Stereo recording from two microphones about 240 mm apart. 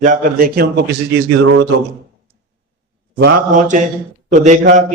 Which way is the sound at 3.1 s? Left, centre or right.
Right.